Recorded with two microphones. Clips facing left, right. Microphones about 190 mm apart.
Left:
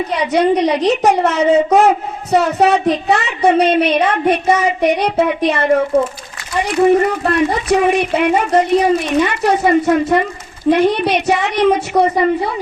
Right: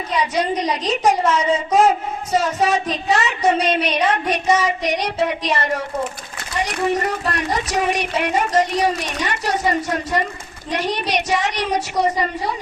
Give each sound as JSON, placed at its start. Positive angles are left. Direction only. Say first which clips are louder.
{"t": 0.1, "sound": "speech", "louder": "left 6 dB", "side_deg": 60}
{"t": 6.9, "sound": "speech", "louder": "left 8 dB", "side_deg": 55}